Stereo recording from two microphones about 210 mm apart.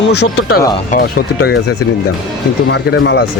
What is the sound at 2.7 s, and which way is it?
Speech, 55° left (ahead or behind).